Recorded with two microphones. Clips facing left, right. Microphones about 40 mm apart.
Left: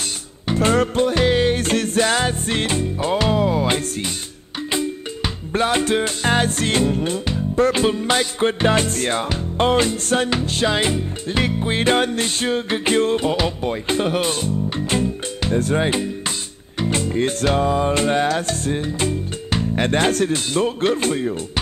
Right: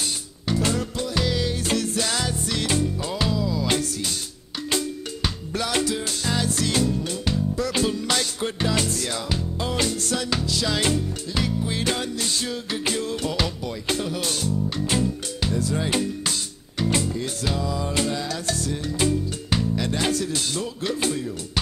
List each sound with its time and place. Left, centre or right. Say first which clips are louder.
0.5 s music: left 7 dB; left
4.6 s music: left 3 dB; left
5.5 s music: left 7 dB; left
5.9 s music: left 7 dB; left
10.8 s music: left 3 dB; left
11.2 s music: left 8 dB; left
13.9 s music: left 8 dB; left
14.2 s speech: left 4 dB; left
15.9 s music: left 2 dB; left
19.8 s music: left 6 dB; left